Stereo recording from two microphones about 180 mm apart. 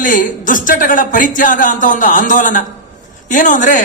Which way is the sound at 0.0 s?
50° left (ahead or behind).